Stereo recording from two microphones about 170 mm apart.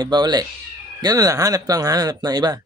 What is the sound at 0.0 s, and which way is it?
Speech, 25° right (ahead or behind).